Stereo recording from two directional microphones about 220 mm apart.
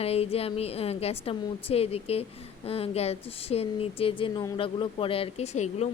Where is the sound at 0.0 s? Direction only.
25° left (ahead or behind).